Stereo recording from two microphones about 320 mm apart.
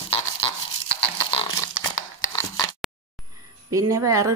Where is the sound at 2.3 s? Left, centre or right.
Centre.